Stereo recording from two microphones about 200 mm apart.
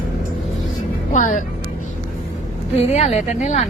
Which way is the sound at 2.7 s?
30° left (ahead or behind).